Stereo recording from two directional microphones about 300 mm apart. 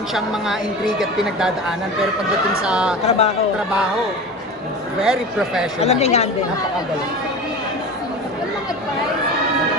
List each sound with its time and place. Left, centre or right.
0.9 s speech: centre
2.6 s speech: centre
3.1 s speech: left
5.0 s speech: centre
5.8 s speech: left